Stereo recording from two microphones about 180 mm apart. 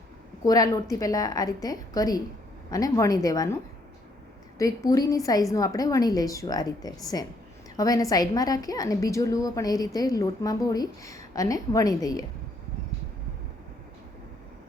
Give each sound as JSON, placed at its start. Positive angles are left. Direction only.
{"t": 0.4, "sound": "a woman's voice", "side_deg": 20}